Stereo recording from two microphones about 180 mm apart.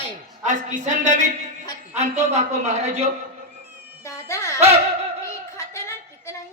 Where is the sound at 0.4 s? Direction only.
45° right (ahead or behind).